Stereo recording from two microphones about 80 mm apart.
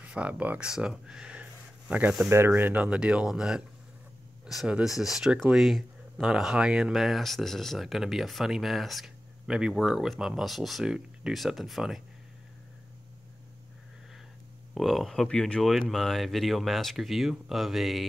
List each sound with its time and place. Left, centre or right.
0.0 s speech: centre
0.7 s speech: centre
2.2 s speech: right; by 3.6 s centre
4.8 s speech: centre
14.7 s speech: centre